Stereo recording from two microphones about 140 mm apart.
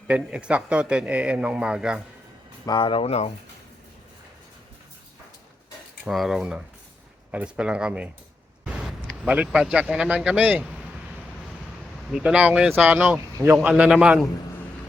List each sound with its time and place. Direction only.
0.1 s a man's voice: 5° right (ahead or behind)
2.6 s speech: 35° left (ahead or behind)
6.1 s a man's voice: centre (ahead or behind)
12.1 s a man's voice: 10° right (ahead or behind)